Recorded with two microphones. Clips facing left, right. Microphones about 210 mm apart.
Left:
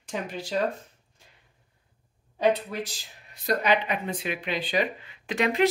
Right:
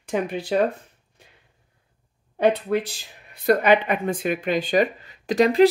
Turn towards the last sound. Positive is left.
turn(degrees=-35)  # may be behind; listen again after turning